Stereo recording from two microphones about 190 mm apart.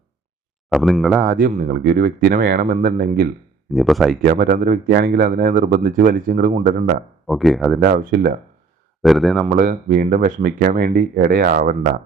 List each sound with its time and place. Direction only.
0.7 s speech: centre (ahead or behind)
1.2 s speech: 50° right (ahead or behind)
3.7 s speech: centre (ahead or behind)
4.2 s speech: 50° right (ahead or behind)
7.3 s speech: centre (ahead or behind)
7.8 s speech: 55° right (ahead or behind)
9.0 s speech: centre (ahead or behind)
9.5 s speech: 45° right (ahead or behind)